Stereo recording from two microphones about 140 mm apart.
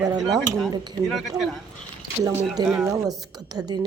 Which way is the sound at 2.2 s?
20° right (ahead or behind).